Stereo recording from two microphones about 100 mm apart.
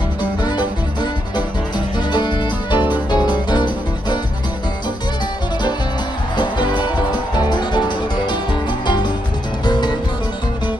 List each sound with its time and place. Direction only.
0.4 s music: 45° left (ahead or behind)
2.1 s music: 45° left (ahead or behind)
6.3 s music: 50° left (ahead or behind)
8.8 s music: 50° left (ahead or behind)